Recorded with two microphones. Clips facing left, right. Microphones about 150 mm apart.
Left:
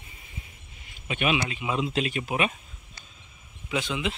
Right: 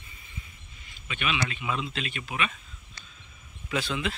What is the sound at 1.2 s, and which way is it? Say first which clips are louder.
Speech: left 4 dB; 15° left (ahead or behind).